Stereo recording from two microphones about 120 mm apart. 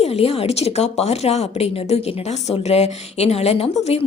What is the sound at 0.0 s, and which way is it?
A woman's voice, 55° left (ahead or behind).